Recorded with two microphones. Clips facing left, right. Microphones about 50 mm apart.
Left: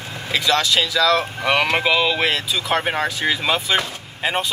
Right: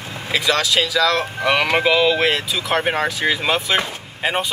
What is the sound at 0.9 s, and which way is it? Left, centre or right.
Speech, centre.